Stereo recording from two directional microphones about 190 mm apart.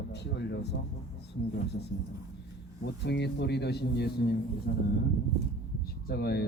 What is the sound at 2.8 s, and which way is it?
A man's voice, 60° left (ahead or behind).